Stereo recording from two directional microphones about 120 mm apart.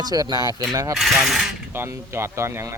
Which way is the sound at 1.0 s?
Centre (ahead or behind).